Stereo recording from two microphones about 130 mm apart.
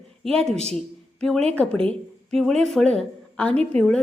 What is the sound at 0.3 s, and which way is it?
A woman's voice, 5° left (ahead or behind).